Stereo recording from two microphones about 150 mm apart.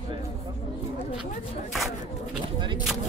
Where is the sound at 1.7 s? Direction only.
Centre (ahead or behind).